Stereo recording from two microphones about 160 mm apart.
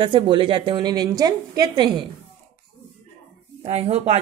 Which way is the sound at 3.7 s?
40° right (ahead or behind).